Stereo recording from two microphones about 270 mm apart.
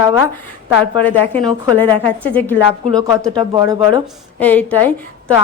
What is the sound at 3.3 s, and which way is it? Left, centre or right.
Speech, centre.